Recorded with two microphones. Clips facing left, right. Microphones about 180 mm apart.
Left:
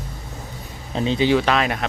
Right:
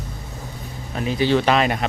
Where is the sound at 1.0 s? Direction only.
25° left (ahead or behind).